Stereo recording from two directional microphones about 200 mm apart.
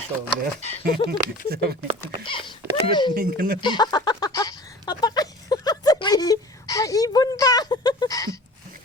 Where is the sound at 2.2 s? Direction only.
25° left (ahead or behind).